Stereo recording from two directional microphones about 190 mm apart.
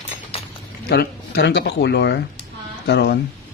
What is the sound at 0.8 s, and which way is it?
Speech, 60° left (ahead or behind).